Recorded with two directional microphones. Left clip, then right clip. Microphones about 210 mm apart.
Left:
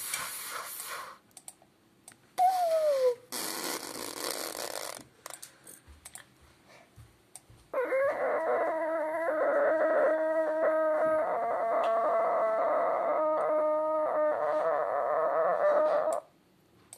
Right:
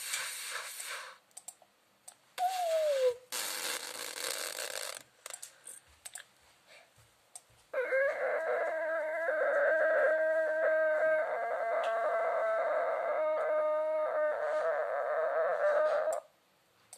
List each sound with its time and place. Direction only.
0.5 s steam: 10° right (ahead or behind)
3.0 s dog: 15° right (ahead or behind)
7.7 s chicken: 20° right (ahead or behind)